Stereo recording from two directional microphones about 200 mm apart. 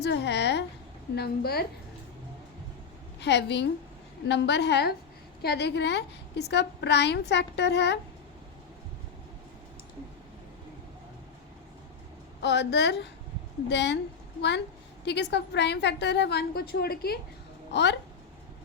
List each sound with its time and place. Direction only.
0.0 s a woman's voice: 55° left (ahead or behind)
3.2 s a woman's voice: 60° left (ahead or behind)
12.4 s a woman's voice: 60° left (ahead or behind)
15.0 s a woman's voice: 60° left (ahead or behind)